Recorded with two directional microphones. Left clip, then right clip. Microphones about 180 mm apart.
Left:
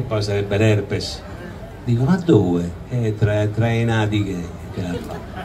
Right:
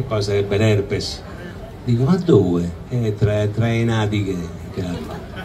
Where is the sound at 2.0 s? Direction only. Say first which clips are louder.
Right 1 dB; 20° right (ahead or behind).